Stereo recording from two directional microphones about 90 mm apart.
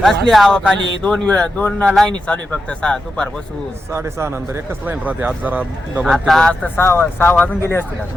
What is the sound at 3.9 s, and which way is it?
Speech, 30° right (ahead or behind).